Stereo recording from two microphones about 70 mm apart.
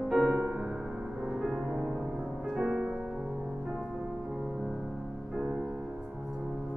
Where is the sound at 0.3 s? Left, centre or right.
Centre.